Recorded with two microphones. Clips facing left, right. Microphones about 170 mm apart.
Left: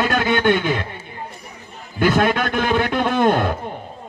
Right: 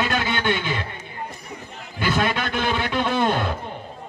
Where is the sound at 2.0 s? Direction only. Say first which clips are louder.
Left 6 dB; 50° left (ahead or behind).